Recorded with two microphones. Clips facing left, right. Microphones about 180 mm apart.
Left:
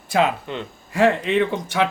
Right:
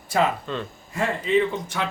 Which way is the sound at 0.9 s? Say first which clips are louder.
Left 4 dB; 80° left.